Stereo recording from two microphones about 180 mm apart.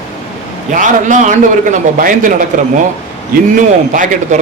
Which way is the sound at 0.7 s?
45° right (ahead or behind).